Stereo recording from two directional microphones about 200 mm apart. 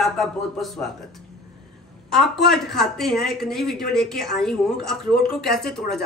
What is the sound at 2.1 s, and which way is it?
Speech, centre (ahead or behind).